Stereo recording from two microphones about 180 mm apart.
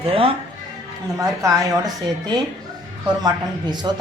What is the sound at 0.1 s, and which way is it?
Speech, 30° right (ahead or behind).